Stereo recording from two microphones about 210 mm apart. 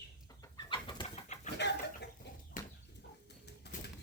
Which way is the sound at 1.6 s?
55° left (ahead or behind).